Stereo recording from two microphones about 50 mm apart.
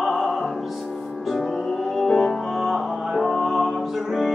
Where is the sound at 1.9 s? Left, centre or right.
Centre.